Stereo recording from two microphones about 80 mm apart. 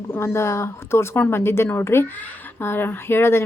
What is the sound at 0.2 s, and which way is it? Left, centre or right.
A woman's voice, left.